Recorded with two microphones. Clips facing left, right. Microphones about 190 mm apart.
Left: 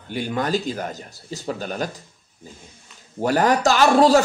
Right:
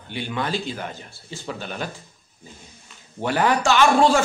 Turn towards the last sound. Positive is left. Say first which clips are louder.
# left 2 dB
turn(degrees=40)  # may be behind; listen again after turning